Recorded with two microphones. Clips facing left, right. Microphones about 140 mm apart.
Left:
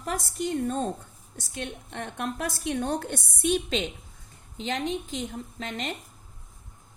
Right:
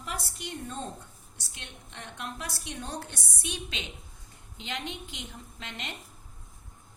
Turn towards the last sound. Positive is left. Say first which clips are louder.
# left 8 dB
turn(degrees=45)  # may be behind; listen again after turning